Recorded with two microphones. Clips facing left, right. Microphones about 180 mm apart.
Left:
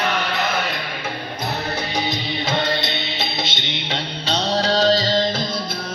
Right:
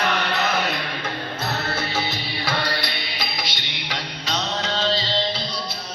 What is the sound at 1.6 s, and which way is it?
Music, 15° left (ahead or behind).